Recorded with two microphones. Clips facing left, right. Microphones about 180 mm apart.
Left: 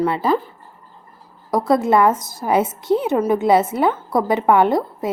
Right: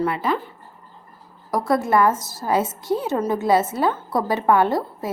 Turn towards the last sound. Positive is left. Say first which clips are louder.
# left 4 dB
turn(degrees=20)  # may be behind; listen again after turning